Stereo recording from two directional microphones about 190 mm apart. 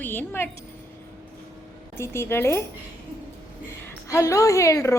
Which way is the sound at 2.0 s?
15° left (ahead or behind).